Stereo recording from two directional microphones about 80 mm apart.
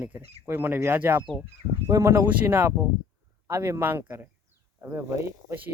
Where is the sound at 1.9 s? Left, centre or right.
Right.